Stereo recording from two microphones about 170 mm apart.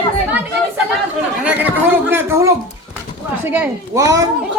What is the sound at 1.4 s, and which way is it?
A man's voice, 10° right (ahead or behind).